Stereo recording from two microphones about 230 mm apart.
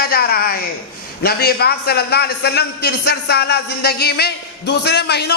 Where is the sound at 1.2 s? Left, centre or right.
Left.